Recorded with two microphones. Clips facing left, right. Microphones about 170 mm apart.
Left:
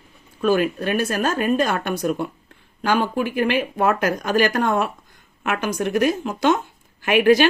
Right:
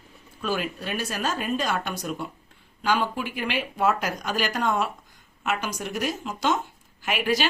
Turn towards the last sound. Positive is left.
turn(degrees=60)  # may be behind; listen again after turning